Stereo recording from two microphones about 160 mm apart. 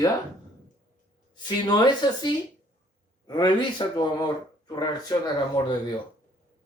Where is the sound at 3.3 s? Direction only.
25° left (ahead or behind).